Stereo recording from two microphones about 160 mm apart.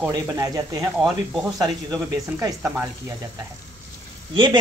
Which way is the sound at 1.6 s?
20° right (ahead or behind).